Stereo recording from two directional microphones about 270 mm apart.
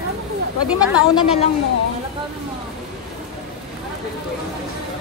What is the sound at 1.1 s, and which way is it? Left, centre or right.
Speech, left.